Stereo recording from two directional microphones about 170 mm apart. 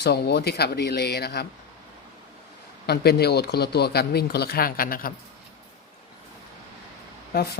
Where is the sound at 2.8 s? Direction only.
70° left (ahead or behind).